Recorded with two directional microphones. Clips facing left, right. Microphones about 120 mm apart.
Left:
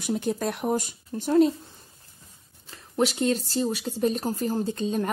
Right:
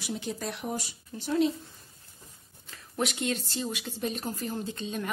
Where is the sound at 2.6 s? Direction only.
30° left (ahead or behind).